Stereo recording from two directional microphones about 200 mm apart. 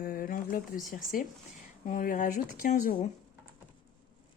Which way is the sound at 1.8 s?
40° left (ahead or behind).